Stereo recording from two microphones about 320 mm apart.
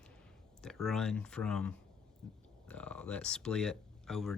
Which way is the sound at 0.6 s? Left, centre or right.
Centre.